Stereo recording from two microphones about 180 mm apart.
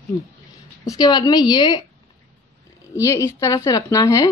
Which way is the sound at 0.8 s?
25° left (ahead or behind).